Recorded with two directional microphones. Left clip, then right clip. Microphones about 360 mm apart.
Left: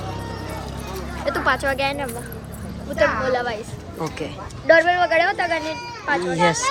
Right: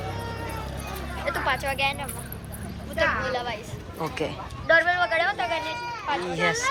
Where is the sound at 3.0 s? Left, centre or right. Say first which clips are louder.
Left 6 dB; left.